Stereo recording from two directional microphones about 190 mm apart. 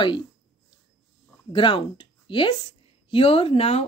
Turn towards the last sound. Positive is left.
turn(degrees=30)  # may be behind; listen again after turning